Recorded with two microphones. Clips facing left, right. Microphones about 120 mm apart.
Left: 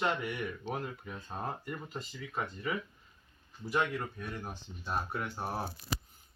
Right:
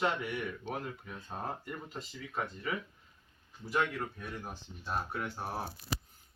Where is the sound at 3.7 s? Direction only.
Centre (ahead or behind).